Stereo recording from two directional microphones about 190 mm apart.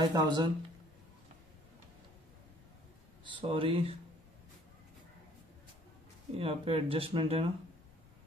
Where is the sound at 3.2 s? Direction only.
25° right (ahead or behind).